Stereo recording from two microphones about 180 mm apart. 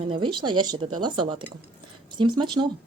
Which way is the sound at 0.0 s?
25° right (ahead or behind).